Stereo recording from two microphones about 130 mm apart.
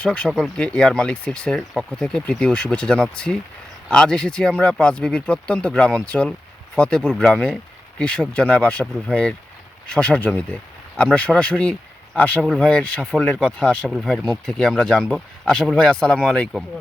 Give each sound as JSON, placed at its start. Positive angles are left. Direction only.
{"t": 0.0, "sound": "speech", "side_deg": 5}